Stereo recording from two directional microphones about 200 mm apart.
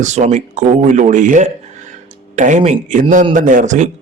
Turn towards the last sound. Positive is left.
turn(degrees=-35)  # may be behind; listen again after turning